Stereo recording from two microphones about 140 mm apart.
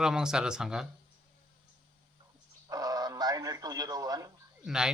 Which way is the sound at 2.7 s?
25° right (ahead or behind).